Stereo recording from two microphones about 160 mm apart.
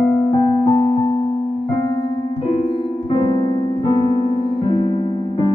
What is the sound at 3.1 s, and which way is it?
Piano, 30° left (ahead or behind).